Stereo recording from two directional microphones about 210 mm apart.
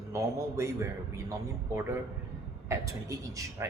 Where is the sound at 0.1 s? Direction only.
15° right (ahead or behind).